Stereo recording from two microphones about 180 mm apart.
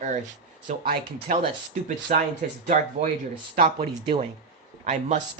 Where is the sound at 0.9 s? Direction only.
60° right (ahead or behind).